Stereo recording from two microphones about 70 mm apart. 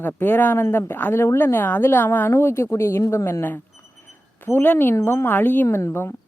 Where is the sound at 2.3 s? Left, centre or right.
Left.